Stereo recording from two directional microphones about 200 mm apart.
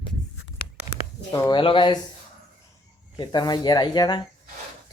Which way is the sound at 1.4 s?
20° left (ahead or behind).